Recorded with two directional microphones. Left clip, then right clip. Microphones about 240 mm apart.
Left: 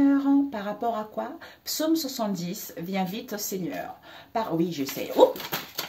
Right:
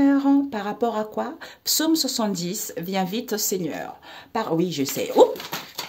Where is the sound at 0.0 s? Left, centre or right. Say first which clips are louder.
Right 3 dB; right.